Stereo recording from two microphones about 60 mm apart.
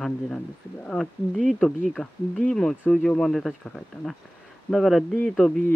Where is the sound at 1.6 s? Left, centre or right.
Left; by 5.0 s centre.